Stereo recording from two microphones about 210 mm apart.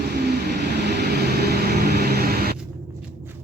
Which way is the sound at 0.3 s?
50° right (ahead or behind).